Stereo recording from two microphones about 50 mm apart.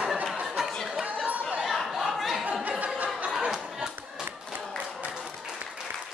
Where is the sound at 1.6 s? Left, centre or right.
Centre.